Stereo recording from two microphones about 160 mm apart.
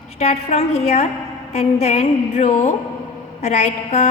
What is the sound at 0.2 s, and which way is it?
A woman's voice, 40° left (ahead or behind).